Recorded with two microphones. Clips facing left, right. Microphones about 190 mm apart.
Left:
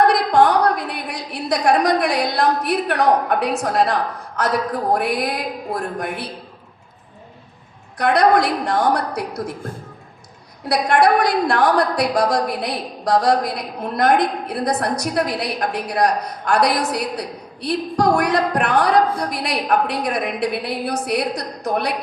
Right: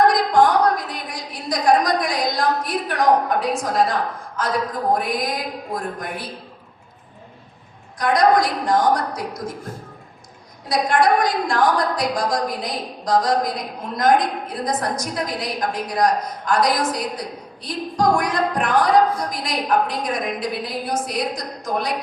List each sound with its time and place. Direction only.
0.1 s a sound: 65° left (ahead or behind)
4.9 s speech: 65° left (ahead or behind)
7.9 s a woman's voice: 65° left (ahead or behind)
10.7 s a woman's voice: 65° left (ahead or behind)